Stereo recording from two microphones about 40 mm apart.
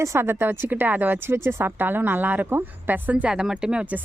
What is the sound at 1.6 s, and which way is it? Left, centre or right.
A woman's voice, right.